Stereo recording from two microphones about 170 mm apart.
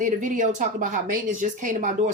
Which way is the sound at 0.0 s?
50° right (ahead or behind).